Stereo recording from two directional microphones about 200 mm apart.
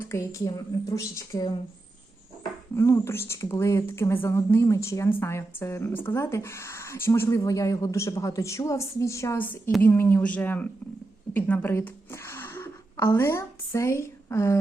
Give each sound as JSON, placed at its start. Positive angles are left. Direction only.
{"t": 0.0, "sound": "speech", "side_deg": 15}
{"t": 2.7, "sound": "a woman's voice", "side_deg": 15}